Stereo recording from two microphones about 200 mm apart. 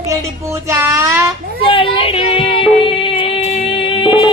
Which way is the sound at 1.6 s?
25° left (ahead or behind).